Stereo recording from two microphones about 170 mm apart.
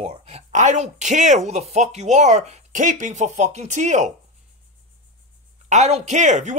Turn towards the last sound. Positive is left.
turn(degrees=-45)  # may be behind; listen again after turning